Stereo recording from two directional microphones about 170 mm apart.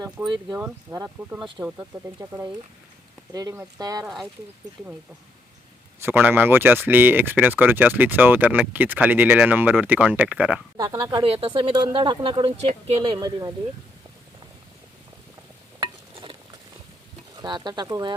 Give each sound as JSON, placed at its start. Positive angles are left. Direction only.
{"t": 0.2, "sound": "speech", "side_deg": -10}
{"t": 3.3, "sound": "speech", "side_deg": -15}
{"t": 4.0, "sound": "speech", "side_deg": 0}
{"t": 6.0, "sound": "speech", "side_deg": -10}
{"t": 10.8, "sound": "speech", "side_deg": -25}
{"t": 17.3, "sound": "speech", "side_deg": -25}